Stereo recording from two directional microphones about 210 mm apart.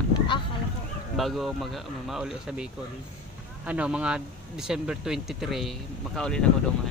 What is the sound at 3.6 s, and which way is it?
Speech, 5° right (ahead or behind).